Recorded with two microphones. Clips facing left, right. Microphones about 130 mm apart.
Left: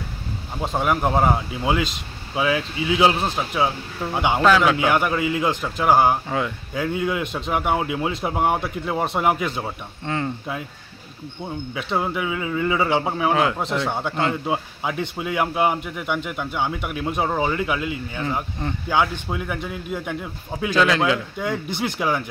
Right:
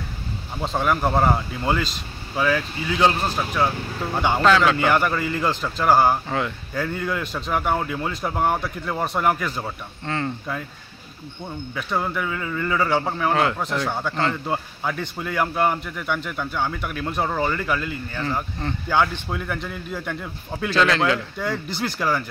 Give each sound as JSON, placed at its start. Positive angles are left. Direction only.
{"t": 0.6, "sound": "speech", "side_deg": 10}
{"t": 21.6, "sound": "speech", "side_deg": 20}